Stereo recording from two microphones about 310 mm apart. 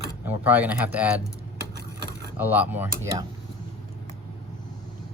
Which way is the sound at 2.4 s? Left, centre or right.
Centre.